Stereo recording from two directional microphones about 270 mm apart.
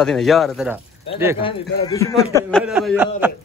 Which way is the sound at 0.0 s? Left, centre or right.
Centre.